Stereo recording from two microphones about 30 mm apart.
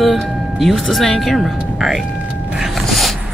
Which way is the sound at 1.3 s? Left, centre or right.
Centre.